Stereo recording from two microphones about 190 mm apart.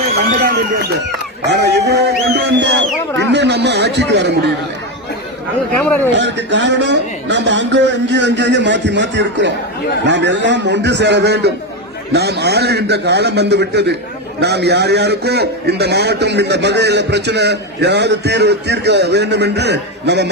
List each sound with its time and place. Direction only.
0.3 s a man's voice: 55° right (ahead or behind)
6.1 s a man's voice: 70° right (ahead or behind)